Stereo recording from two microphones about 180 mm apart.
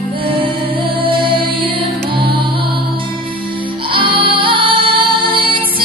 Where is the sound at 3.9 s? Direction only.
30° right (ahead or behind).